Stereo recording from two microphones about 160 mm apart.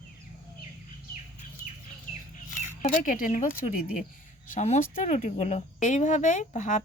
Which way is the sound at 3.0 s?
55° left (ahead or behind).